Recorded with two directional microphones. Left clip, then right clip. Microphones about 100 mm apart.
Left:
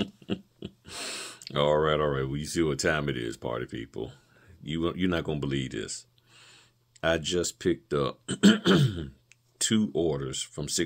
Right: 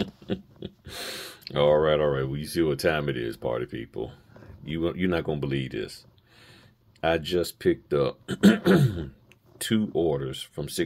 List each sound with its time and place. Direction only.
0.0 s speech: 25° left (ahead or behind)
8.4 s a sound: 15° left (ahead or behind)
9.6 s speech: 25° left (ahead or behind)